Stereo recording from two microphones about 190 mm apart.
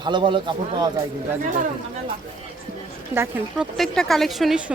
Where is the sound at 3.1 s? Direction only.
10° right (ahead or behind).